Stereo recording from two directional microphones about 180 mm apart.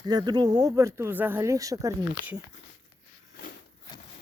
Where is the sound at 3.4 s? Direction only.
55° left (ahead or behind).